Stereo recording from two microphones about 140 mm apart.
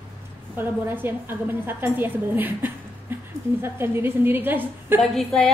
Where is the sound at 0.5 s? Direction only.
15° right (ahead or behind).